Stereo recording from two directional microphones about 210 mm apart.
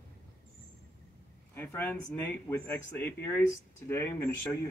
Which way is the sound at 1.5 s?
10° left (ahead or behind).